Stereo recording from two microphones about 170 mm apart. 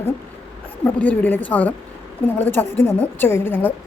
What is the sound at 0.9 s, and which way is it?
Speech, 10° left (ahead or behind).